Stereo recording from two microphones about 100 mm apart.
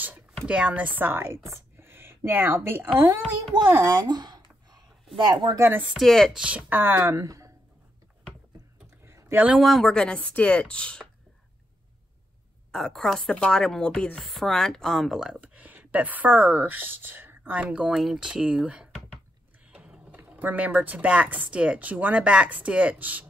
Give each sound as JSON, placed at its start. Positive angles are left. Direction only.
{"t": 0.5, "sound": "speech", "side_deg": -10}
{"t": 4.0, "sound": "a sound", "side_deg": -45}
{"t": 5.1, "sound": "speech", "side_deg": -50}
{"t": 5.6, "sound": "speech", "side_deg": -20}
{"t": 5.9, "sound": "speech", "side_deg": 0}
{"t": 6.3, "sound": "speech", "side_deg": -10}
{"t": 9.0, "sound": "a sound", "side_deg": -25}
{"t": 9.6, "sound": "speech", "side_deg": 0}
{"t": 12.7, "sound": "speech", "side_deg": 5}
{"t": 15.4, "sound": "a woman's voice", "side_deg": -15}
{"t": 17.6, "sound": "speech", "side_deg": -5}